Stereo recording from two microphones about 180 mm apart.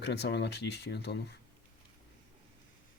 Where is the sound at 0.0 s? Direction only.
70° left (ahead or behind).